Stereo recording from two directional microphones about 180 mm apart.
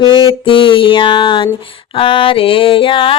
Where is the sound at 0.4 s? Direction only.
30° left (ahead or behind).